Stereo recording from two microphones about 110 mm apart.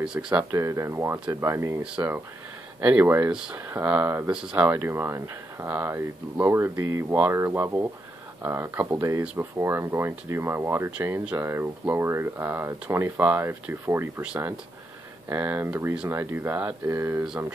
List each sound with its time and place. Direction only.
0.0 s speech: 5° right (ahead or behind)
0.5 s speech: 25° right (ahead or behind)
1.8 s speech: 10° right (ahead or behind)
3.3 s speech: 5° right (ahead or behind)
3.5 s speech: 25° right (ahead or behind); by 4.6 s 10° right (ahead or behind)
4.6 s speech: 20° right (ahead or behind)
14.2 s speech: 10° right (ahead or behind)